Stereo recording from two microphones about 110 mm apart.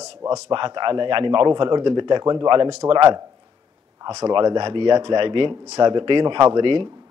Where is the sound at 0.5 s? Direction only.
45° right (ahead or behind).